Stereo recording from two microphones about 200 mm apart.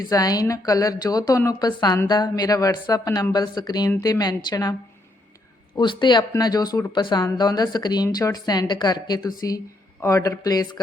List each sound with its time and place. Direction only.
0.0 s a woman's voice: 20° left (ahead or behind)
5.7 s a woman's voice: 25° left (ahead or behind)